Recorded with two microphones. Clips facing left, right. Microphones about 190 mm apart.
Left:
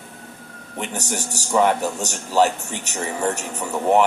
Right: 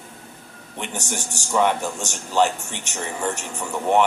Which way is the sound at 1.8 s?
40° left (ahead or behind).